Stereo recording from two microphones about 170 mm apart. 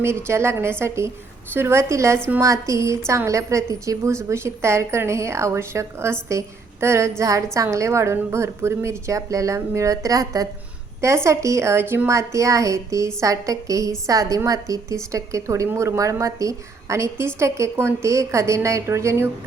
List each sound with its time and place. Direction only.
0.0 s a woman's voice: 15° right (ahead or behind)